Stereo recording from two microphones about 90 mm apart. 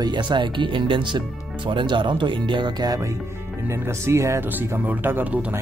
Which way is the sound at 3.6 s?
30° right (ahead or behind).